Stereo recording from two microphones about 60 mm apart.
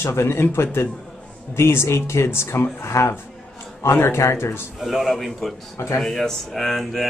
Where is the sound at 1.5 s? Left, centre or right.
Left.